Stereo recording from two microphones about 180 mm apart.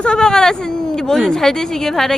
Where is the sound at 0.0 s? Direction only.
5° left (ahead or behind).